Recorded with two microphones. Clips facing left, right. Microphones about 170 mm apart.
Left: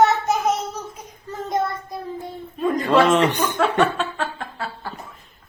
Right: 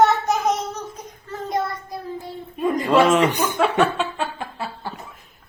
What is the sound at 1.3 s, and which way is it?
Child singing, 20° left (ahead or behind).